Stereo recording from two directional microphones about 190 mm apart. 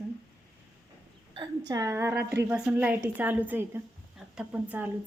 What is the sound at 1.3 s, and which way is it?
A woman's voice, 20° right (ahead or behind).